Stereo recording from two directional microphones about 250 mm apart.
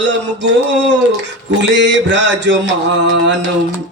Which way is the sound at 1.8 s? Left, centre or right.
Right.